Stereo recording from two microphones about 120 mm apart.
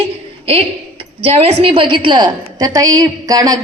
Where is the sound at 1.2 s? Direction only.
55° right (ahead or behind).